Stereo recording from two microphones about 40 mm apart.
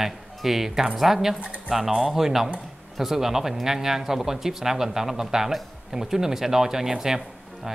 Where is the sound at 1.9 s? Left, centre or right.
Centre.